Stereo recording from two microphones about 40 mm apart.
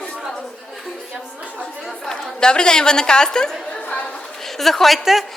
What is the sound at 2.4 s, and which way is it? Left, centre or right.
A woman's voice, centre.